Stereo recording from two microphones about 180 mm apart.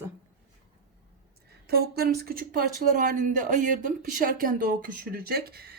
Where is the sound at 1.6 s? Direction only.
60° right (ahead or behind).